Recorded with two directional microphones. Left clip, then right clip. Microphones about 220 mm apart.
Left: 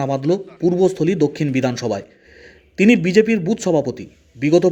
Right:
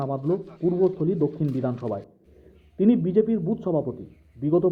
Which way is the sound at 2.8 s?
70° left (ahead or behind).